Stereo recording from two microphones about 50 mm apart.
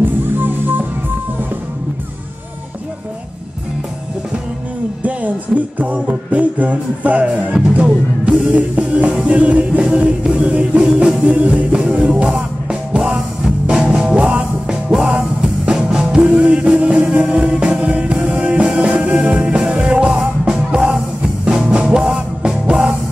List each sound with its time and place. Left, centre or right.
0.4 s music: right
5.0 s music: right
7.7 s speech: right
8.5 s music: right
16.3 s music: right